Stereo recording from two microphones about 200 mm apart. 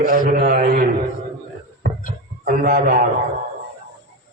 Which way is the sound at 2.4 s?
45° right (ahead or behind).